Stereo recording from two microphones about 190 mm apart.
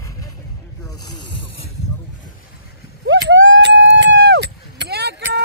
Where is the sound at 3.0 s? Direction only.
70° right (ahead or behind).